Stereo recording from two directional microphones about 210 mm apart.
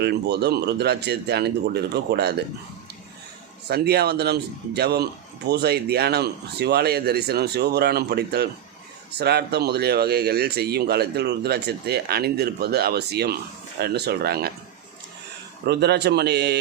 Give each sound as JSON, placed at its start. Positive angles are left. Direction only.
{"t": 0.0, "sound": "speech", "side_deg": -50}
{"t": 3.7, "sound": "speech", "side_deg": -50}
{"t": 15.6, "sound": "speech", "side_deg": -50}